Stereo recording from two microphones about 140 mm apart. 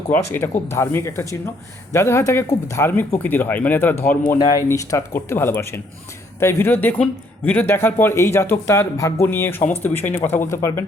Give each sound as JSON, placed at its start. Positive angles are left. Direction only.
{"t": 0.1, "sound": "a man's voice", "side_deg": 15}
{"t": 4.4, "sound": "a man's voice", "side_deg": 30}